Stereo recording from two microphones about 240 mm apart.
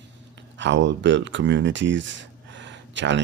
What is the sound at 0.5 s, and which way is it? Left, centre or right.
Speech, right.